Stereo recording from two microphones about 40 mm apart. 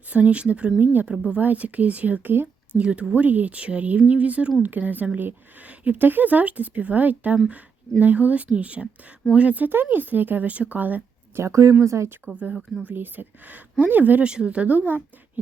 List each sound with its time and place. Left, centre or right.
0.1 s speech: right
1.4 s speech: right
2.2 s speech: right
2.7 s speech: right
9.6 s speech: right
10.5 s speech: right
11.3 s speech: right
12.2 s speech: right
12.9 s speech: right
14.2 s speech: right
14.7 s speech: right